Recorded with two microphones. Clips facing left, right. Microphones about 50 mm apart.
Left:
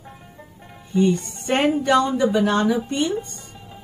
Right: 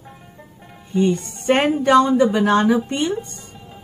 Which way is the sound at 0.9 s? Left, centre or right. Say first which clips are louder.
Even; right.